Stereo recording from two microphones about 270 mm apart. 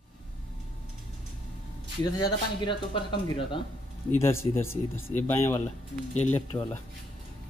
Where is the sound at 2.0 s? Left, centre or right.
Centre.